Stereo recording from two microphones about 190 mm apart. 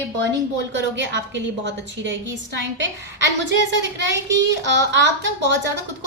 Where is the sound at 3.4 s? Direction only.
70° right (ahead or behind).